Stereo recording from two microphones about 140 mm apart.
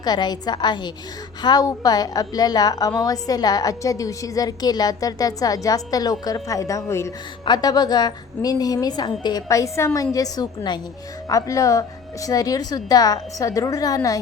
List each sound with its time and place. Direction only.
0.0 s a woman's voice: 30° left (ahead or behind)